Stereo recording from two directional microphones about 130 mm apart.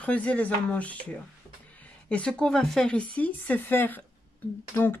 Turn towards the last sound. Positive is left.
turn(degrees=20)  # may be behind; listen again after turning